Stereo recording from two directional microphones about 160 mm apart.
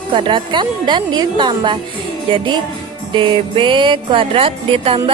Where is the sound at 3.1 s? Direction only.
30° right (ahead or behind).